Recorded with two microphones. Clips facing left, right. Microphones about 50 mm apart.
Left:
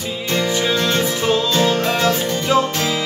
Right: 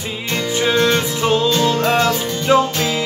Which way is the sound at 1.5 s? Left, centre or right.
Left.